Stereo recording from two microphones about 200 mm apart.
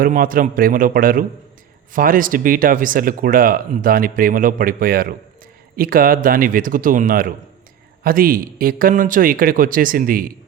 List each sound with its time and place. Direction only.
0.0 s speech: 45° right (ahead or behind)